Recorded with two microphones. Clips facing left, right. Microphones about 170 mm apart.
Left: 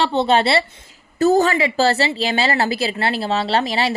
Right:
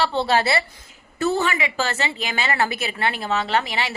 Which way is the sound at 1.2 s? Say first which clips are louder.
Left 7 dB; 40° left (ahead or behind).